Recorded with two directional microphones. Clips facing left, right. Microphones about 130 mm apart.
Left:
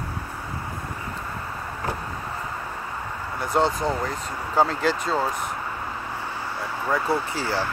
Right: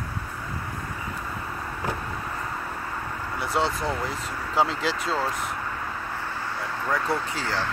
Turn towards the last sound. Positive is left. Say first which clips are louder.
# left 3 dB
turn(degrees=5)  # may be behind; listen again after turning